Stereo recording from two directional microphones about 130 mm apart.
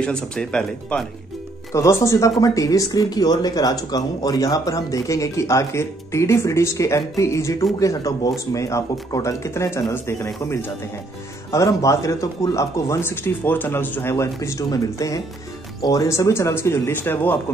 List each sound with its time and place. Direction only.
0.0 s speech: 5° left (ahead or behind)
1.7 s speech: 25° left (ahead or behind)